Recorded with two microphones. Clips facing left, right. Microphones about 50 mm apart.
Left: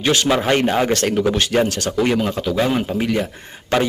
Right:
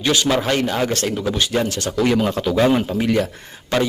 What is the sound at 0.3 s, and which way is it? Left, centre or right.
Speech, centre.